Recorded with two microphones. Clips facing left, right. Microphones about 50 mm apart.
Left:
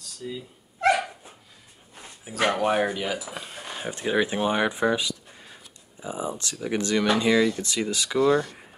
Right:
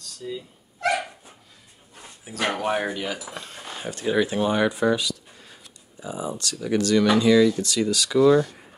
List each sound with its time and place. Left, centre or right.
0.0 s gasp: centre
2.4 s speech: centre; by 8.2 s left
8.2 s speech: centre